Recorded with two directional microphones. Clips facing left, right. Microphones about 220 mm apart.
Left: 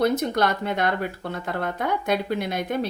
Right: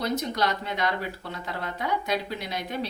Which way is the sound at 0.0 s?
50° left (ahead or behind).